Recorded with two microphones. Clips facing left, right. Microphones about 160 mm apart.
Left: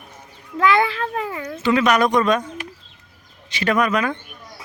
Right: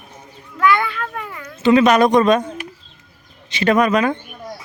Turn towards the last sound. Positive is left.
turn(degrees=-25)  # may be behind; listen again after turning